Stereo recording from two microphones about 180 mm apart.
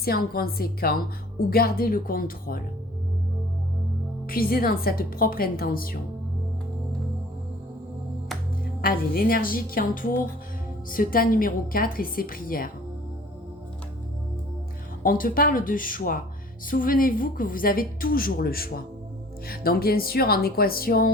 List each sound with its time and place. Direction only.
0.0 s a woman's voice: 55° left (ahead or behind)
4.3 s a woman's voice: 55° left (ahead or behind)
8.8 s a woman's voice: 55° left (ahead or behind)
15.0 s a woman's voice: 50° left (ahead or behind)